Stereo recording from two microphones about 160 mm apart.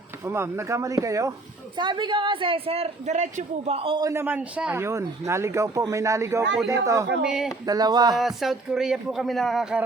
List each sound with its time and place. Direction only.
0.3 s a woman's voice: 15° right (ahead or behind)
7.2 s speech: 5° right (ahead or behind)
7.7 s a woman's voice: 25° right (ahead or behind)
8.2 s speech: centre (ahead or behind)